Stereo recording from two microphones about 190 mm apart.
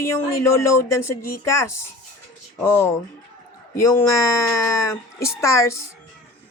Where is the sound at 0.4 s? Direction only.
15° left (ahead or behind).